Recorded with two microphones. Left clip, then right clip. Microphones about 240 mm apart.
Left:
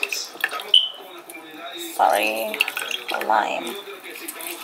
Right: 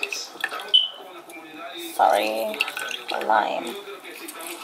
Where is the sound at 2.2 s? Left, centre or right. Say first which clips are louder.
Left 2 dB; right.